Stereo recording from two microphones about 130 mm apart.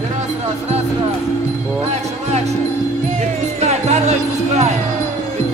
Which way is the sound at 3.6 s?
60° right (ahead or behind).